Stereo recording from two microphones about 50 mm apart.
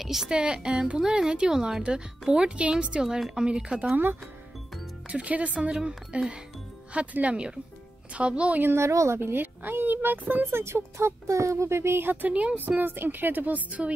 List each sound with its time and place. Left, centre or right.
0.0 s speech: centre
0.3 s speech: centre
3.9 s speech: right
5.1 s speech: right
8.7 s speech: right
9.2 s a woman's voice: right
10.4 s speech: right
12.3 s a woman's voice: right